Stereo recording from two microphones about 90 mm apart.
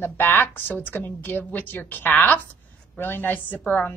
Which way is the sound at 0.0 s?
25° left (ahead or behind).